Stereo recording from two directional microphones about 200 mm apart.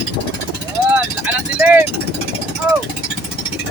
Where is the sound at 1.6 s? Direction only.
5° right (ahead or behind).